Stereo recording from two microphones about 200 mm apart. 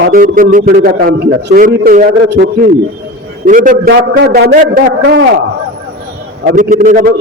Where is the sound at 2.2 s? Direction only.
55° right (ahead or behind).